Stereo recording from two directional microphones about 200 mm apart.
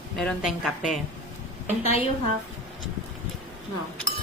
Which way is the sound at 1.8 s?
30° left (ahead or behind).